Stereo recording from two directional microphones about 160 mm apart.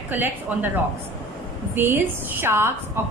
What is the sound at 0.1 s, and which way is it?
Speech, 10° right (ahead or behind).